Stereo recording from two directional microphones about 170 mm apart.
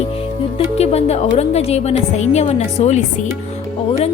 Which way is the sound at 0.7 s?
40° left (ahead or behind).